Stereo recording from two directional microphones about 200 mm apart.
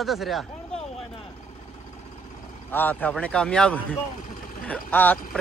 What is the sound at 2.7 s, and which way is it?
Speech, 10° left (ahead or behind).